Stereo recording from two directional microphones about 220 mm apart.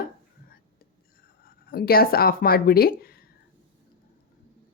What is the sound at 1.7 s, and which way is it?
Speech, 45° left (ahead or behind).